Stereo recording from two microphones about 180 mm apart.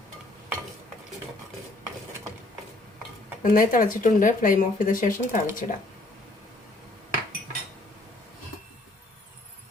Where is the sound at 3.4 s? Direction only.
50° left (ahead or behind).